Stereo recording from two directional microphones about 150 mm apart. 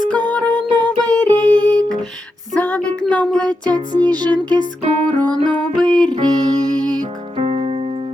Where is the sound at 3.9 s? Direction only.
25° right (ahead or behind).